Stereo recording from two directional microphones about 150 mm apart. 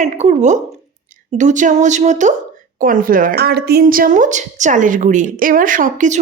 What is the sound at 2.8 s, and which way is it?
A woman's voice, 65° right (ahead or behind).